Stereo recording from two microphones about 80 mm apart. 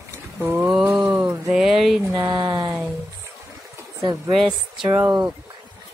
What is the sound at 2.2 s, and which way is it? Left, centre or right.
Speech, right.